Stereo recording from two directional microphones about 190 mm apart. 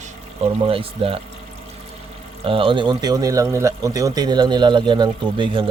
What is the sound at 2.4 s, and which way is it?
Speech, 30° right (ahead or behind).